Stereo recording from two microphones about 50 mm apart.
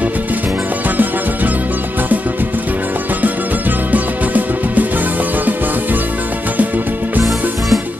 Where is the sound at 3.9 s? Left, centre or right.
Right.